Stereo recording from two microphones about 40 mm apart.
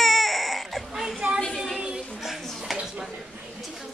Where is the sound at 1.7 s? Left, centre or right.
Right.